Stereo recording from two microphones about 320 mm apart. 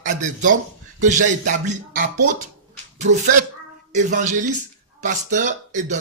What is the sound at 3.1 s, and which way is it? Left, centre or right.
Speech, right.